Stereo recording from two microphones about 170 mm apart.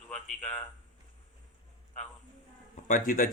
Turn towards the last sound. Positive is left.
turn(degrees=55)  # may be behind; listen again after turning